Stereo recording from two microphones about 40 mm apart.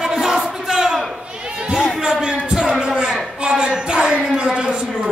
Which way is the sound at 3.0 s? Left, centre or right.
Centre.